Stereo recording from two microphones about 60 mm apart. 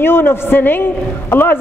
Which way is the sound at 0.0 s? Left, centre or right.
Left.